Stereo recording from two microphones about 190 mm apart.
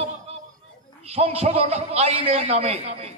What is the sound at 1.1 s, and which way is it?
A man's voice, 30° right (ahead or behind).